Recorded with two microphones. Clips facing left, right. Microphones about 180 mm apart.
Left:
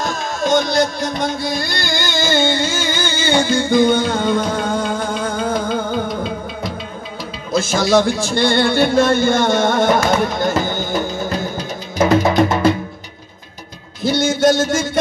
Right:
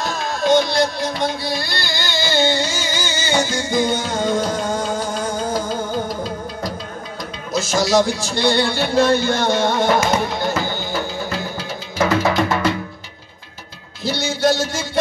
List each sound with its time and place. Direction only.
0.0 s music: 45° left (ahead or behind)
7.5 s speech: 55° left (ahead or behind)
10.4 s music: 50° left (ahead or behind)
11.5 s music: 20° left (ahead or behind)
14.0 s a sound: 50° left (ahead or behind)